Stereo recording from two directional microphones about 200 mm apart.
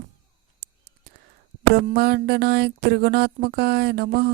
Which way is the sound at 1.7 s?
55° right (ahead or behind).